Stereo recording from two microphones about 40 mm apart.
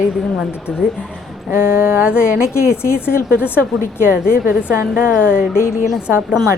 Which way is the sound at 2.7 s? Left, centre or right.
Left.